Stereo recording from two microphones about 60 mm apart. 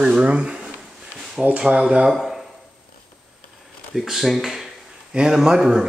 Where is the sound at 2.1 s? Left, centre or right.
Centre.